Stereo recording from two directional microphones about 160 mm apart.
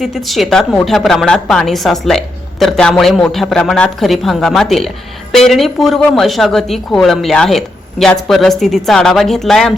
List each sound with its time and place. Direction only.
0.0 s a woman's voice: centre (ahead or behind)